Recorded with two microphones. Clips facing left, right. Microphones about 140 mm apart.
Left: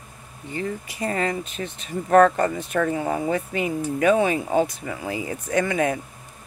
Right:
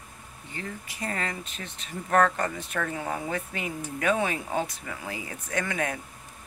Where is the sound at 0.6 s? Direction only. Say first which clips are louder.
Left 8 dB; 20° left (ahead or behind).